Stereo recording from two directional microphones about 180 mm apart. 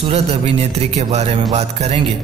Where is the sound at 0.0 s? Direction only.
35° right (ahead or behind).